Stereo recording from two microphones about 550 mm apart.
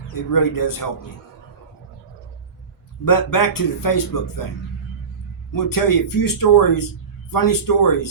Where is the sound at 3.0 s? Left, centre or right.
Left.